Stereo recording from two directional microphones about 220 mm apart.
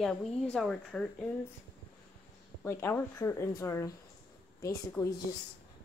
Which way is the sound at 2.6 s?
10° left (ahead or behind).